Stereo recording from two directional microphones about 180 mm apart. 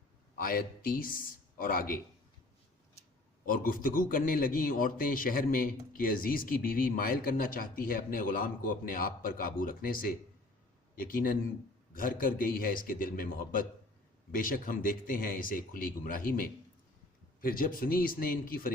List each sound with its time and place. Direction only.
0.3 s speech: 55° left (ahead or behind)
3.4 s a man's voice: 50° left (ahead or behind)